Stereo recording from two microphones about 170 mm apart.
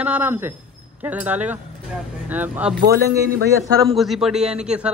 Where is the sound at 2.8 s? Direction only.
60° right (ahead or behind).